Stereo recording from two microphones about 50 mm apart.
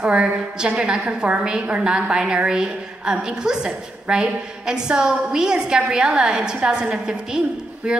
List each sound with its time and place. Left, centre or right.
0.0 s a woman's voice: centre